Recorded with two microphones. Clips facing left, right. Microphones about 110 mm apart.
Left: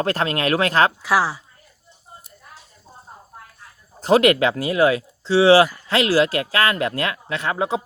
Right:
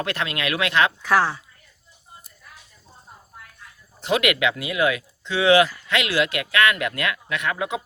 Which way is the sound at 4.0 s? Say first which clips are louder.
Left 6 dB; 35° left (ahead or behind).